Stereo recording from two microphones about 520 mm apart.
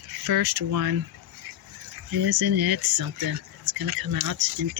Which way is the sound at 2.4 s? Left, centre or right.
Right.